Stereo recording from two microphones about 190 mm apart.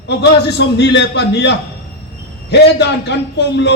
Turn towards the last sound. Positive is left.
turn(degrees=60)  # may be behind; listen again after turning